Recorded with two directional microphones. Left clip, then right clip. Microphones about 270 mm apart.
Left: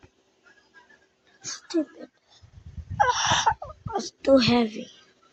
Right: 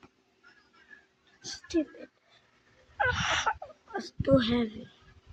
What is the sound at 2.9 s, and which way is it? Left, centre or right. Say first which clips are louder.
Whimper: left 6 dB; centre.